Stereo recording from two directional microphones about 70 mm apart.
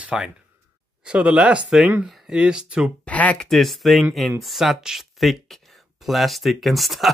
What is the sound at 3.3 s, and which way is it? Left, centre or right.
Speech, centre.